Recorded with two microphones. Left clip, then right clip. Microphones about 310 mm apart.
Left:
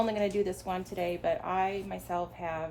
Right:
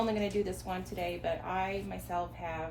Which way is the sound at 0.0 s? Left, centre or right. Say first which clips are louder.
Left 3 dB; left.